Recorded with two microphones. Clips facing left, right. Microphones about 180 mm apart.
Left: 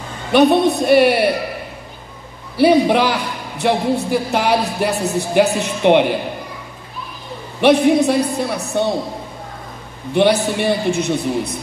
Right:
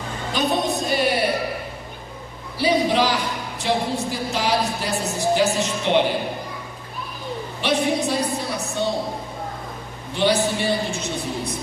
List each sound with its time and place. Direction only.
0.3 s a man's voice: 65° left (ahead or behind)
2.5 s a man's voice: 60° left (ahead or behind)
7.6 s a man's voice: 60° left (ahead or behind)
10.1 s a man's voice: 60° left (ahead or behind)